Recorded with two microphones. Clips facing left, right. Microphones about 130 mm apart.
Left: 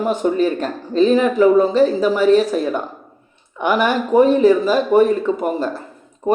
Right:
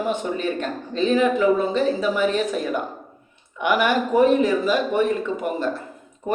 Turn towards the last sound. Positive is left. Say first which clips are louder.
# left 5 dB
turn(degrees=35)  # may be behind; listen again after turning